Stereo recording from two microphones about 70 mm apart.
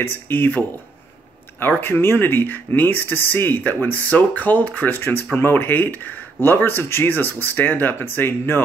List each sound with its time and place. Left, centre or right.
0.0 s speech: left
1.6 s speech: left